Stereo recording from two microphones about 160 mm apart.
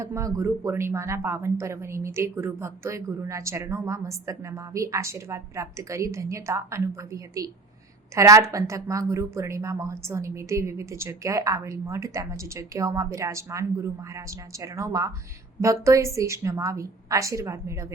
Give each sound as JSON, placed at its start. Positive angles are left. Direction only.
{"t": 0.0, "sound": "a woman's voice", "side_deg": -20}